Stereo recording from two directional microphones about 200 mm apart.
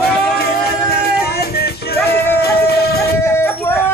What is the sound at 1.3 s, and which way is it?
Music, 50° left (ahead or behind).